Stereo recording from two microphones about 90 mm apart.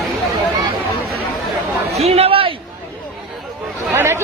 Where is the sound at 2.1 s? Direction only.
90° right.